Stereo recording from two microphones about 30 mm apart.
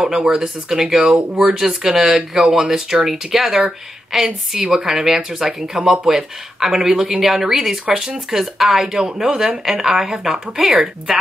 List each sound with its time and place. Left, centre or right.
0.1 s speech: right
0.4 s speech: centre
6.9 s speech: right
7.2 s speech: centre
8.8 s speech: right
9.7 s speech: centre